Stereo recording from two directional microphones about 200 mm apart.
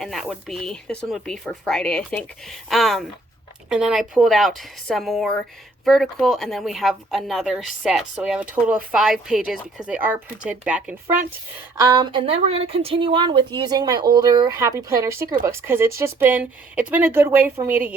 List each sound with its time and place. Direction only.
0.0 s speech: centre (ahead or behind)
11.8 s speech: 20° right (ahead or behind)